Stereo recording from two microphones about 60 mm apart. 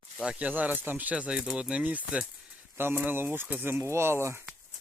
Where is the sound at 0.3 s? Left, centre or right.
Right.